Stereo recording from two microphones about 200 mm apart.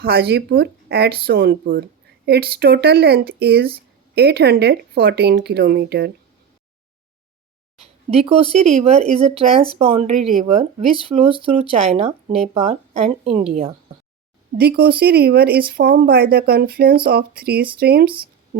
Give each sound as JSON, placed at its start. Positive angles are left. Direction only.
{"t": 0.0, "sound": "a woman's voice", "side_deg": -50}
{"t": 7.8, "sound": "speech", "side_deg": -30}
{"t": 14.6, "sound": "a woman's voice", "side_deg": -50}